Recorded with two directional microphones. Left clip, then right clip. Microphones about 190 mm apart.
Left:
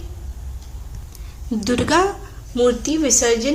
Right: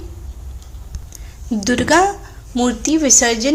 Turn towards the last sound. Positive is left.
turn(degrees=-35)  # may be behind; listen again after turning